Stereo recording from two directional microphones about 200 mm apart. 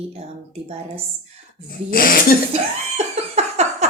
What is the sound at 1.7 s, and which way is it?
Speech, 45° left (ahead or behind).